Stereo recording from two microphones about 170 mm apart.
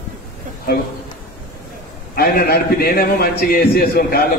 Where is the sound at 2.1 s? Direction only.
65° left (ahead or behind).